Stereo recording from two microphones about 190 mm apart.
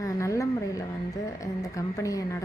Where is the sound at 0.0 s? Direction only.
15° left (ahead or behind).